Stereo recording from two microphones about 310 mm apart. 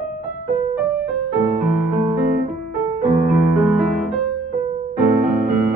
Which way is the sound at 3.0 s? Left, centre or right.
Centre.